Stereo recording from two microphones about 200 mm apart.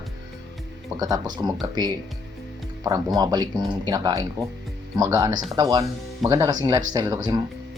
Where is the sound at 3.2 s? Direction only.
20° right (ahead or behind).